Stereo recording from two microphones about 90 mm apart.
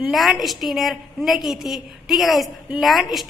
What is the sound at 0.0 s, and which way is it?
A woman's voice, centre (ahead or behind).